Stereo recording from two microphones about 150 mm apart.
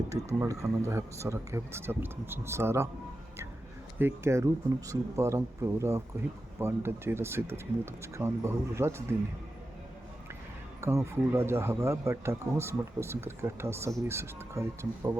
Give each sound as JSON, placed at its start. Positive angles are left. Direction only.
{"t": 0.1, "sound": "speech", "side_deg": -20}
{"t": 3.9, "sound": "speech", "side_deg": -15}
{"t": 10.8, "sound": "speech", "side_deg": -20}